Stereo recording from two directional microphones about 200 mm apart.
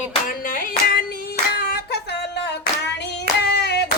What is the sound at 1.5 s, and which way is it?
Hands, 55° left (ahead or behind).